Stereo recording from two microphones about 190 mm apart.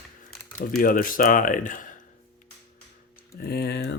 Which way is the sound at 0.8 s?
50° left (ahead or behind).